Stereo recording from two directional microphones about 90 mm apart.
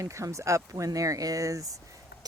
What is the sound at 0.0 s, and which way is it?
Speech, 35° right (ahead or behind).